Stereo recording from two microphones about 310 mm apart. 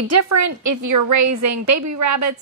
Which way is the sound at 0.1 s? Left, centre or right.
Right.